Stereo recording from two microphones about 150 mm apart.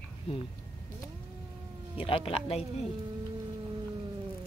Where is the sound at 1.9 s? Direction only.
40° left (ahead or behind).